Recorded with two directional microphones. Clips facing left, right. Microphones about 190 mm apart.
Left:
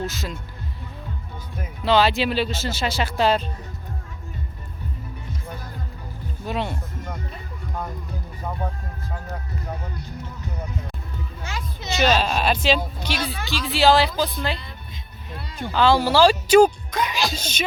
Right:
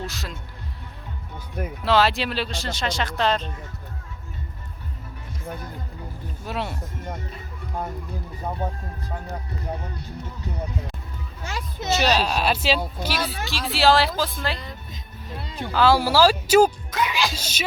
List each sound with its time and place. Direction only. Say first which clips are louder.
0.0 s speech: left 4 dB; centre (ahead or behind)
1.8 s speech: left 2 dB; centre (ahead or behind)
6.4 s speech: left 3 dB; 5° right (ahead or behind)
11.4 s speech: right 5 dB; 40° right (ahead or behind)
11.9 s speech: left 2 dB; centre (ahead or behind)
15.4 s a sound: right 2 dB; 25° right (ahead or behind)
15.6 s speech: left 1 dB; 5° right (ahead or behind)
17.1 s speech: even; 40° left (ahead or behind)
17.3 s speech: left 3 dB; 10° right (ahead or behind)